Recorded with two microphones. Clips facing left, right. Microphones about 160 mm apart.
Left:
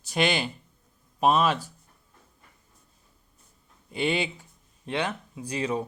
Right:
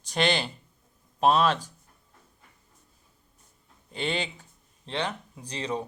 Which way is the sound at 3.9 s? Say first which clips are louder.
Left 4 dB; 10° left (ahead or behind).